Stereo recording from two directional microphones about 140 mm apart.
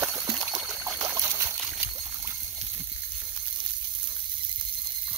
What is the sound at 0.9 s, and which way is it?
Trickle, 25° right (ahead or behind).